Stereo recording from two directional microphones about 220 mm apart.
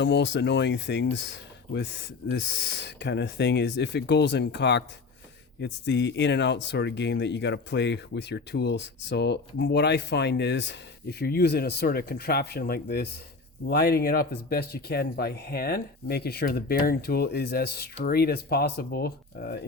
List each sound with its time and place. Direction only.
0.0 s speech: 50° left (ahead or behind)